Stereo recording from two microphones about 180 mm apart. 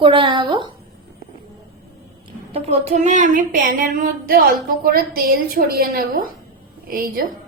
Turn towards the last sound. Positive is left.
turn(degrees=-50)  # may be behind; listen again after turning